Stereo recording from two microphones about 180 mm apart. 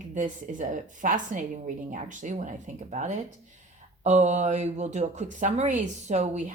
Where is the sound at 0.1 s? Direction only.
45° right (ahead or behind).